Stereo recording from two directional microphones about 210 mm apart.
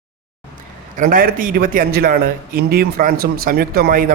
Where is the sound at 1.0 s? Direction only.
40° right (ahead or behind).